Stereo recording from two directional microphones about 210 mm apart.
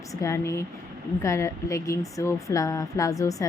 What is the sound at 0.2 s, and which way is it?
Speech, 15° left (ahead or behind).